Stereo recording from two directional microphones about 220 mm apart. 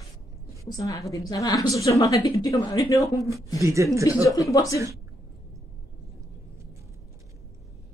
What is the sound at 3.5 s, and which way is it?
Speech, 15° right (ahead or behind).